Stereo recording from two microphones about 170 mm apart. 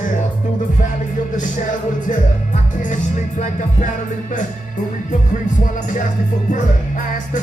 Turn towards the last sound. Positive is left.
turn(degrees=50)  # may be behind; listen again after turning